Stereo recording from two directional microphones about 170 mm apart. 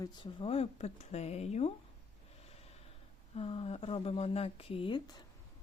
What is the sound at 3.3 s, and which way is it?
Speech, 35° left (ahead or behind).